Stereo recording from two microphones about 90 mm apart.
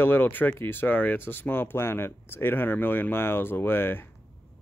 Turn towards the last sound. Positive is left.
turn(degrees=25)  # may be behind; listen again after turning